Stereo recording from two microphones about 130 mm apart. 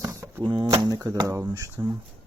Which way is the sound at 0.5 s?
35° right (ahead or behind).